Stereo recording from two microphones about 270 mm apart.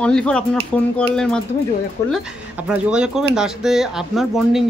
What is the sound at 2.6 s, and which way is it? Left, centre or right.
Speech, centre.